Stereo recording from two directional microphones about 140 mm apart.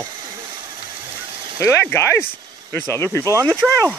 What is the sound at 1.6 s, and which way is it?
Speech, 20° left (ahead or behind).